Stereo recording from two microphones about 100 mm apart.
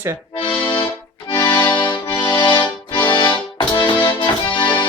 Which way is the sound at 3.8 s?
55° left (ahead or behind).